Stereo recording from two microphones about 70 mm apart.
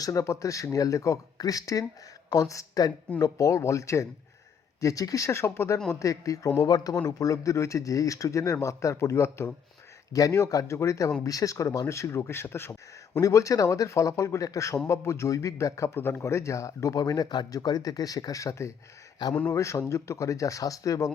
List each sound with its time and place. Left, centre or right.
0.0 s speech: left
6.6 s speech: left
7.2 s speech: left
10.1 s speech: left
13.1 s speech: left
16.0 s speech: left
16.2 s speech: left
17.1 s speech: left
19.3 s speech: centre
19.5 s speech: left